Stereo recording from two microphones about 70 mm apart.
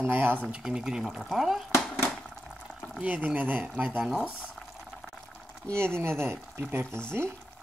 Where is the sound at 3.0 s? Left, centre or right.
Centre.